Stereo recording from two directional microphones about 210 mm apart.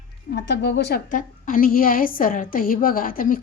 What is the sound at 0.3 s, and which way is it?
A woman's voice, 55° left (ahead or behind).